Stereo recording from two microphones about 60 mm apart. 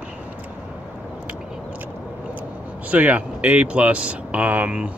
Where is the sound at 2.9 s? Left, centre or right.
Right.